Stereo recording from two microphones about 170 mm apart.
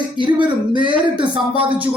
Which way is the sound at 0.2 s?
30° right (ahead or behind).